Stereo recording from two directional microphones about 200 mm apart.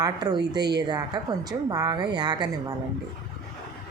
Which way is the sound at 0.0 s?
20° right (ahead or behind).